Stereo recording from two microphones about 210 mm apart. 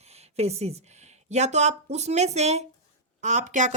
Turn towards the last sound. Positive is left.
turn(degrees=-35)  # may be behind; listen again after turning